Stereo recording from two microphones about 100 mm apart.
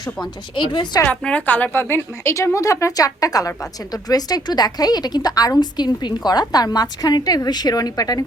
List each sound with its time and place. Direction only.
0.0 s a woman's voice: 45° left (ahead or behind)
1.0 s a woman's voice: 10° left (ahead or behind); by 8.2 s 40° left (ahead or behind)